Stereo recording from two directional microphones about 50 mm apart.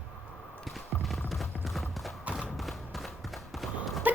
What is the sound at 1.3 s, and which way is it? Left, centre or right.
Clip-clop, centre.